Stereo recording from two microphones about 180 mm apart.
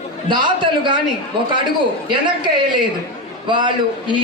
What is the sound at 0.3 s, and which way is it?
A man's voice, 25° right (ahead or behind).